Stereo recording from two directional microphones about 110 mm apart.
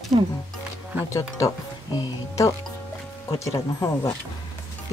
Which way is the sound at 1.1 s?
30° left (ahead or behind).